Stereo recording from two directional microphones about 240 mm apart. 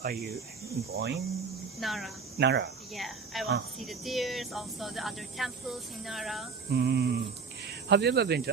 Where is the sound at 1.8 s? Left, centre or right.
Centre.